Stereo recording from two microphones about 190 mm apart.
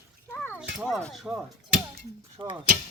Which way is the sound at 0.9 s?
5° left (ahead or behind).